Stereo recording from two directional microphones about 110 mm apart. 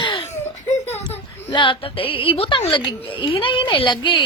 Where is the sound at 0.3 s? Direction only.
85° left.